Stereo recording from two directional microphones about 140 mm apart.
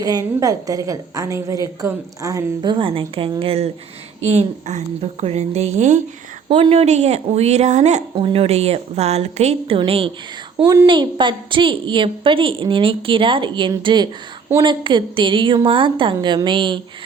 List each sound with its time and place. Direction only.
0.0 s a woman's voice: 25° right (ahead or behind); by 6.0 s 60° right (ahead or behind)
6.5 s a woman's voice: 40° right (ahead or behind)
8.1 s a woman's voice: 45° right (ahead or behind)